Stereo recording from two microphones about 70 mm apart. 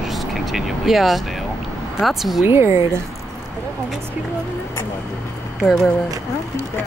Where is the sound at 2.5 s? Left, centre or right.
Right.